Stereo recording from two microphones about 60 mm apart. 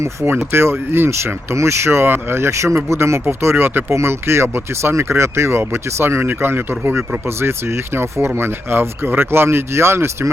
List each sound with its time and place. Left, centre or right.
0.5 s speech: right